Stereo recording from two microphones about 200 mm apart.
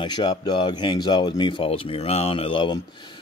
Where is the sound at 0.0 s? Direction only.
20° left (ahead or behind).